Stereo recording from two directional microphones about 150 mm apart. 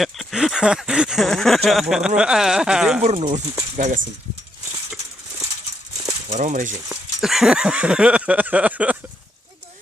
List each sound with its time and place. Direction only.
0.0 s a sound: centre (ahead or behind)
3.0 s speech: 45° right (ahead or behind)
6.2 s speech: 55° right (ahead or behind)
6.8 s speech: centre (ahead or behind)